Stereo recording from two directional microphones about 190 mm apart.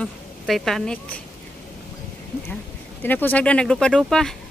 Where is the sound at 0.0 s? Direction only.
Centre (ahead or behind).